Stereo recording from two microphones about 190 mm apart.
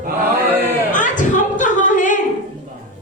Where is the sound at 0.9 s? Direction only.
40° left (ahead or behind).